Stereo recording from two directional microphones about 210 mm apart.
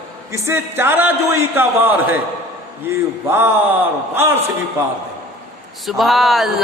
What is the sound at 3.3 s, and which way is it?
Speech, 10° right (ahead or behind).